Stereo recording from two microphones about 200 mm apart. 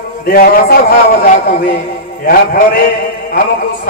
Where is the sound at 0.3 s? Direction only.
50° left (ahead or behind).